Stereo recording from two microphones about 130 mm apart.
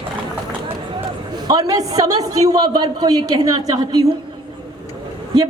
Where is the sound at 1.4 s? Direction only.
30° right (ahead or behind).